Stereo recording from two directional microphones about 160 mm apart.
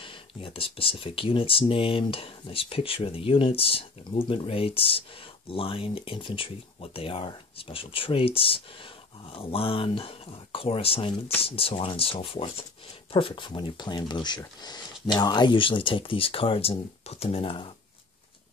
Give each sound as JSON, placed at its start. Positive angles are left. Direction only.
{"t": 0.0, "sound": "speech", "side_deg": 35}